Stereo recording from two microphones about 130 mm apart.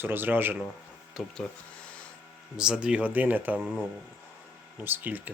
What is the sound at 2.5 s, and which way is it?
Speech, 5° right (ahead or behind).